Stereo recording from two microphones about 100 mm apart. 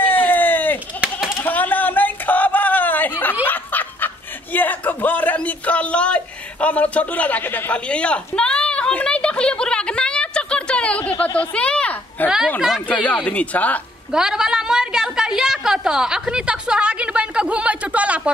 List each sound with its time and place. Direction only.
0.0 s run: 20° left (ahead or behind)
1.0 s pigeon: 5° right (ahead or behind)
1.4 s a sound: 20° left (ahead or behind)
3.4 s snicker: 20° left (ahead or behind)
12.5 s speech: 5° right (ahead or behind)
12.8 s speech: 15° left (ahead or behind)
14.1 s a sound: 5° right (ahead or behind)